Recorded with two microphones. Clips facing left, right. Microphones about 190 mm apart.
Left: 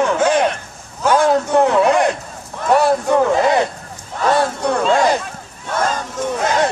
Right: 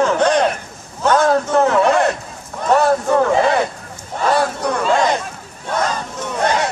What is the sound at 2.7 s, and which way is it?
Crowd, 10° left (ahead or behind).